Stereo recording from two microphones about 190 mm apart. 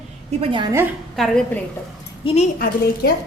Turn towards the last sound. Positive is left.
turn(degrees=50)  # may be behind; listen again after turning